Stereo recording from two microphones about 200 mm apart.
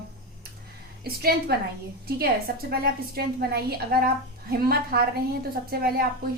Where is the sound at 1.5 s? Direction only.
50° right (ahead or behind).